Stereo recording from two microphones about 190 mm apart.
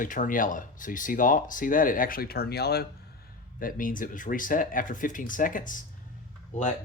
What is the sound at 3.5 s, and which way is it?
Speech, 45° left (ahead or behind).